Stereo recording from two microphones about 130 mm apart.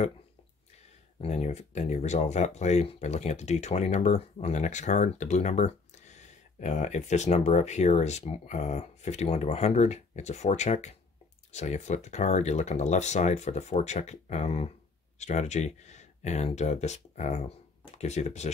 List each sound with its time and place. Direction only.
1.2 s speech: 60° left (ahead or behind)